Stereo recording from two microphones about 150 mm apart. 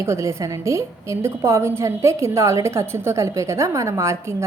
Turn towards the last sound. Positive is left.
turn(degrees=-20)  # may be behind; listen again after turning